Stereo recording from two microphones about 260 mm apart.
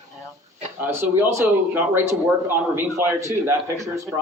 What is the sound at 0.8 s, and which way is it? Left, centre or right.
Speech, centre.